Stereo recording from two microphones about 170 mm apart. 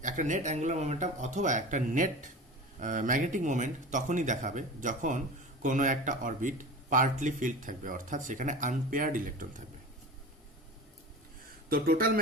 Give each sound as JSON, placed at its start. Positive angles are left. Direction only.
{"t": 0.0, "sound": "speech", "side_deg": -50}
{"t": 11.7, "sound": "speech", "side_deg": -55}